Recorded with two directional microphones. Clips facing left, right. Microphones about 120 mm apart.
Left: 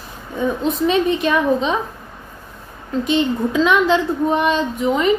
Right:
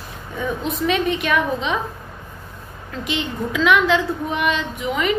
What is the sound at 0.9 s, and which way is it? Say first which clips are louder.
Speech: left 2 dB; 30° left (ahead or behind).